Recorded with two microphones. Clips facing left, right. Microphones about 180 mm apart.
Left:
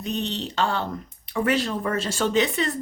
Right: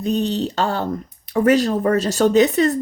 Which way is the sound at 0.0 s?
40° right (ahead or behind).